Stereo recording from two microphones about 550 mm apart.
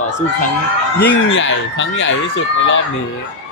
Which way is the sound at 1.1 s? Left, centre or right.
Centre.